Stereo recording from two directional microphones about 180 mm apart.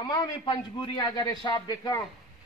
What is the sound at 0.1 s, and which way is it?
A man's voice, 25° left (ahead or behind).